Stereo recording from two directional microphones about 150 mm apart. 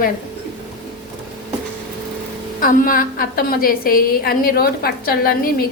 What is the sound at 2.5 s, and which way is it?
A woman's voice, 70° left (ahead or behind).